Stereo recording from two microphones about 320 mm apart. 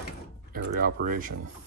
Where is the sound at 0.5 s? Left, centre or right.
Right.